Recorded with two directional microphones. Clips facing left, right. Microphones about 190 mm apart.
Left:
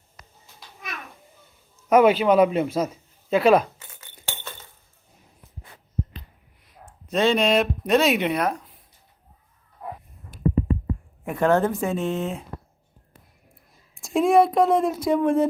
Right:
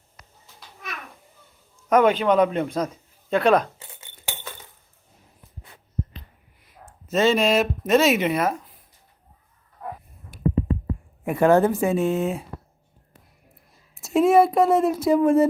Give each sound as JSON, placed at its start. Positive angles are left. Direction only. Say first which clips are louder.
{"t": 1.9, "sound": "speech", "louder": "left 2 dB", "side_deg": 10}
{"t": 3.8, "sound": "rattle", "louder": "right 2 dB", "side_deg": -30}
{"t": 6.8, "sound": "speech", "louder": "right 1 dB", "side_deg": -5}
{"t": 11.3, "sound": "speech", "louder": "right 3 dB", "side_deg": -10}
{"t": 13.9, "sound": "speech", "louder": "right 1 dB", "side_deg": -5}